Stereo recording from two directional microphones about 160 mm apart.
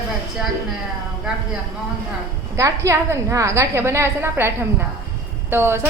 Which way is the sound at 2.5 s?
20° right (ahead or behind).